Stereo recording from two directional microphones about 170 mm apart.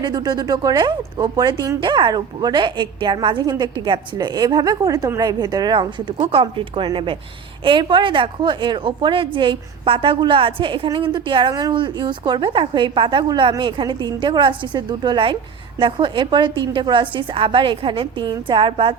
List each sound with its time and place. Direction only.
0.0 s a woman's voice: 25° right (ahead or behind)